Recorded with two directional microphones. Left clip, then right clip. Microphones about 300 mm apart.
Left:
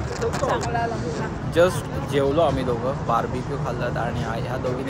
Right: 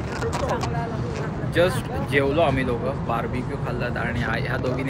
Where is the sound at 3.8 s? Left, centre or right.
Centre.